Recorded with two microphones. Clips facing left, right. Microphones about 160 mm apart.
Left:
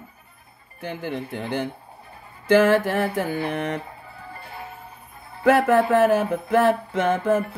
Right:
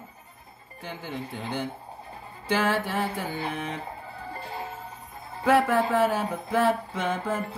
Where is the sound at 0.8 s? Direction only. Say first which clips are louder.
Left 6 dB; 70° left (ahead or behind).